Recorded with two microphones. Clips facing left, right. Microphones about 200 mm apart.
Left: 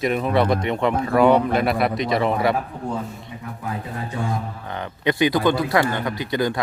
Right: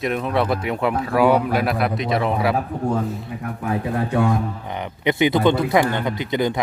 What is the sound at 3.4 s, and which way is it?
Speech, 65° right (ahead or behind).